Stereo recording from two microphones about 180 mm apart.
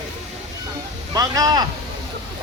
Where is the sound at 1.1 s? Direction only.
20° right (ahead or behind).